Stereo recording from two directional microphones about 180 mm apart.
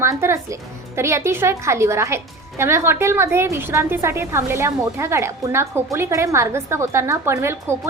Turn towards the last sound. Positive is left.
turn(degrees=-15)  # may be behind; listen again after turning